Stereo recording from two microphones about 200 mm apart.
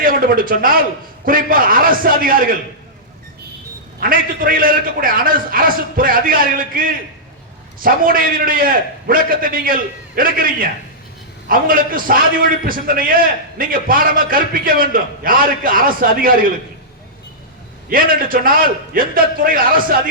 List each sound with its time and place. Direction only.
0.0 s a man's voice: 45° right (ahead or behind)
4.0 s a man's voice: 45° right (ahead or behind)
17.8 s a man's voice: 45° right (ahead or behind)